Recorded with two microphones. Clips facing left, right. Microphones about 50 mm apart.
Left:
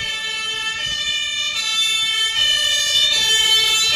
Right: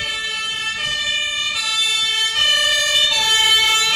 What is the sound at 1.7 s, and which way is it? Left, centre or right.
Emergency vehicle, centre.